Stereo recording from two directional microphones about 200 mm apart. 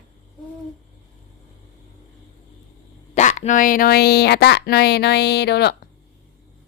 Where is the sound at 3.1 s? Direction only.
35° left (ahead or behind); by 5.7 s 55° left (ahead or behind).